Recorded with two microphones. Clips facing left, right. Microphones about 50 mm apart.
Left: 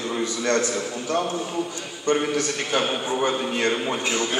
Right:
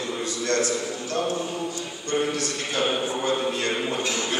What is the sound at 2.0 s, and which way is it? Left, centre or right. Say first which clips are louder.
A man's voice: left 4 dB; left.